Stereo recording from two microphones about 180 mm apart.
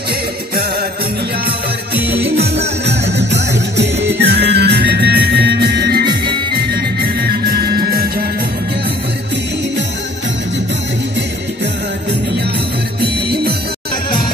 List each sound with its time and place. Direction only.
2.0 s music: 65° right (ahead or behind)
13.0 s music: 65° right (ahead or behind)